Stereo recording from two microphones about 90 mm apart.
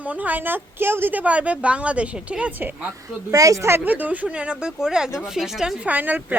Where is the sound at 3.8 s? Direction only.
15° right (ahead or behind).